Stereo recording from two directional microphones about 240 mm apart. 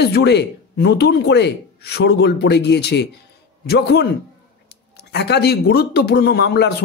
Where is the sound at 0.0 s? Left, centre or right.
Left.